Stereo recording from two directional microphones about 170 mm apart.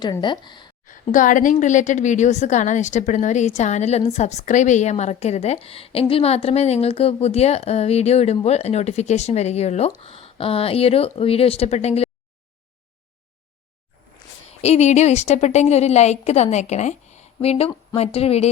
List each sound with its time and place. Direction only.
0.0 s speech: 25° left (ahead or behind)
0.9 s a woman's voice: 50° left (ahead or behind)
14.6 s a woman's voice: 40° left (ahead or behind)